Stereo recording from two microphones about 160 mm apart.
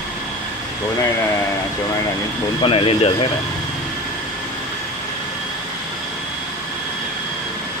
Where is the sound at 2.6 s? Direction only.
35° left (ahead or behind).